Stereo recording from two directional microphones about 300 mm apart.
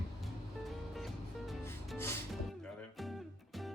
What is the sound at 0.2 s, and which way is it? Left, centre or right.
Music, centre.